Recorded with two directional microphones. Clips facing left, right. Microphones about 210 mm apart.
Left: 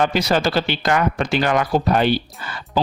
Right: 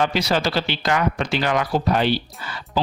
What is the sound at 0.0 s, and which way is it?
A man's voice, 50° left (ahead or behind).